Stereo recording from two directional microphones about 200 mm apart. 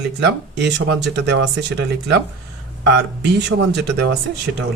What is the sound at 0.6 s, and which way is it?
Speech, 60° right (ahead or behind).